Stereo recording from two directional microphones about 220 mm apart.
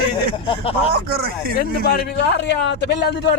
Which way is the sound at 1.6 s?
45° left (ahead or behind).